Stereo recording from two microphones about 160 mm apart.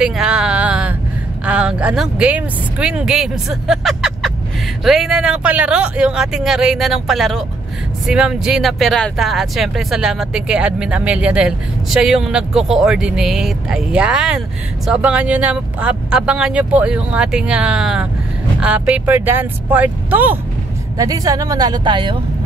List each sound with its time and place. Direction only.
0.0 s a sound: 5° right (ahead or behind)
1.4 s speech: 5° right (ahead or behind)
21.0 s speech: 20° right (ahead or behind)